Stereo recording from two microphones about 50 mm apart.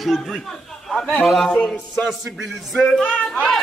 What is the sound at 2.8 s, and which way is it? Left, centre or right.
Speech, centre.